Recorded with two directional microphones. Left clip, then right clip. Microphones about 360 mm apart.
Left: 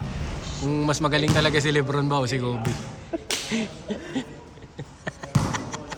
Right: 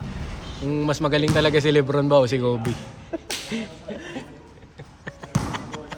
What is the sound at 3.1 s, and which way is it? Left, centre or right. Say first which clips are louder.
Whip: even; centre.